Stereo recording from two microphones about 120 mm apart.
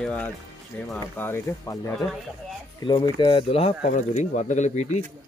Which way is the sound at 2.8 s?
40° left (ahead or behind).